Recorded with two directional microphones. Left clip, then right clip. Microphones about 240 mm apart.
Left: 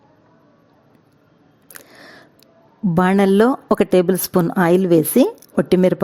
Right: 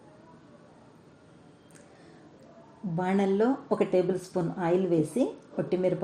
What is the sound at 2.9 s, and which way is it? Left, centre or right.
A woman's voice, left.